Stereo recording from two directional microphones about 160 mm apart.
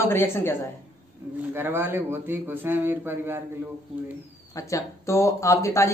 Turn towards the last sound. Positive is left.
turn(degrees=20)  # may be behind; listen again after turning